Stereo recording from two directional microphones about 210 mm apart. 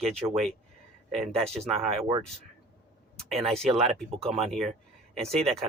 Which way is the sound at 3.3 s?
Centre (ahead or behind).